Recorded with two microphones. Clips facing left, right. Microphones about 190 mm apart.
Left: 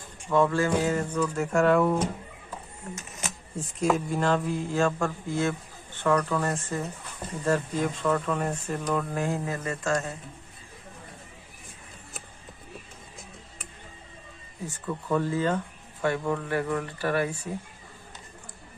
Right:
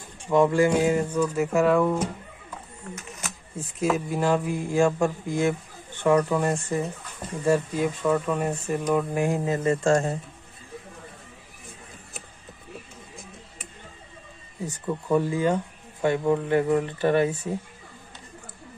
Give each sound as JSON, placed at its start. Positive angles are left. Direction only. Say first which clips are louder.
{"t": 0.3, "sound": "speech", "louder": "right 4 dB", "side_deg": -15}
{"t": 3.5, "sound": "speech", "louder": "even", "side_deg": -5}
{"t": 14.7, "sound": "speech", "louder": "right 4 dB", "side_deg": -15}